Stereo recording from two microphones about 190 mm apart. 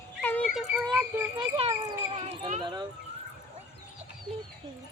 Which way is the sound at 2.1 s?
35° right (ahead or behind).